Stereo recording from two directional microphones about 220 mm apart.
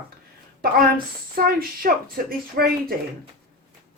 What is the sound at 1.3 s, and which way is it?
Speech, 40° right (ahead or behind).